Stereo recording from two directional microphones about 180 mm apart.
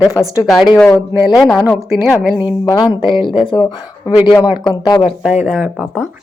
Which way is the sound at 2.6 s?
25° left (ahead or behind).